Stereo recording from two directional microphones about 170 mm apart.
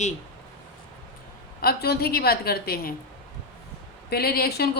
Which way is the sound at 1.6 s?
65° left (ahead or behind).